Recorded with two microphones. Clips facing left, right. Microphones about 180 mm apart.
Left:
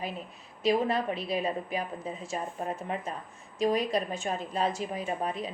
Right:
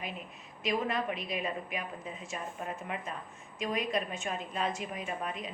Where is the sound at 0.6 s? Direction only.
30° left (ahead or behind).